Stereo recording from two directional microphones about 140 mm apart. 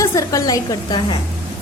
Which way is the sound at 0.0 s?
25° left (ahead or behind).